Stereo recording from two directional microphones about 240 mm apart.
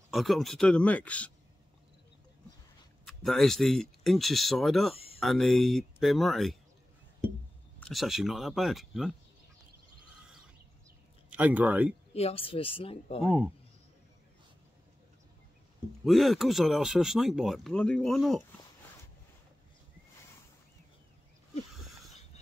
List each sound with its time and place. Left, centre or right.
0.1 s speech: centre
3.1 s speech: centre
4.9 s a sound: left
5.2 s speech: centre
7.8 s speech: centre
11.2 s speech: centre
12.1 s speech: left
16.1 s speech: centre